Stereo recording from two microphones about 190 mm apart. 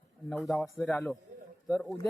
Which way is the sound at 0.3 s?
Centre (ahead or behind).